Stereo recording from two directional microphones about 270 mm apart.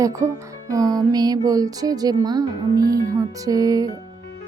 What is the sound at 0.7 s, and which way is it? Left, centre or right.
Speech, centre.